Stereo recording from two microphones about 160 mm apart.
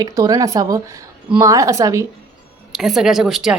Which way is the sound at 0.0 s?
25° right (ahead or behind).